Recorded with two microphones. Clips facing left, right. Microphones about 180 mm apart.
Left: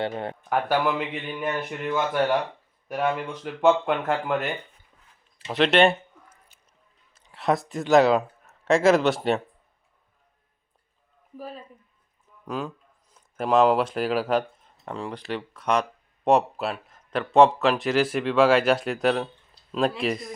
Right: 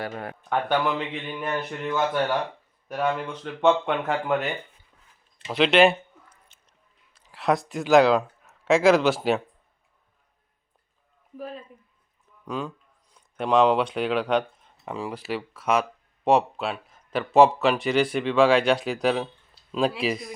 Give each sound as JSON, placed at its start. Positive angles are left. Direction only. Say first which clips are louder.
{"t": 0.1, "sound": "speech", "louder": "left 3 dB", "side_deg": 25}
{"t": 0.5, "sound": "speech", "louder": "even", "side_deg": 5}
{"t": 12.5, "sound": "speech", "louder": "even", "side_deg": 5}